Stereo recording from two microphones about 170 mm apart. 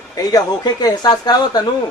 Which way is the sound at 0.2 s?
20° left (ahead or behind).